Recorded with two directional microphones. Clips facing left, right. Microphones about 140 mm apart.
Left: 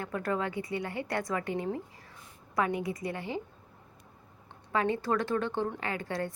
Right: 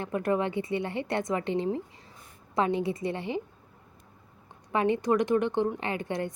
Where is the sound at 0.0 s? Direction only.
20° right (ahead or behind).